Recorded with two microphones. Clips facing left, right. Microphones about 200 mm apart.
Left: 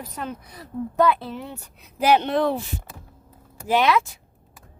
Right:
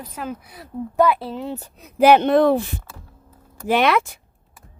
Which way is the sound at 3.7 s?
60° right (ahead or behind).